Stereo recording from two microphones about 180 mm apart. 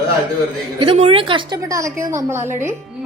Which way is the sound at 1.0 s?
30° right (ahead or behind).